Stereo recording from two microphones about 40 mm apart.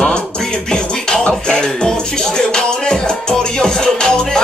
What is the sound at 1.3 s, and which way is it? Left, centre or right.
Music, centre.